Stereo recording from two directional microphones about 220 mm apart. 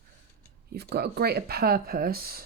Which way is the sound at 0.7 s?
45° right (ahead or behind).